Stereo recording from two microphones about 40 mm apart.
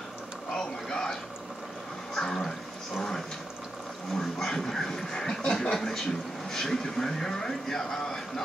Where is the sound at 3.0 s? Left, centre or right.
Centre.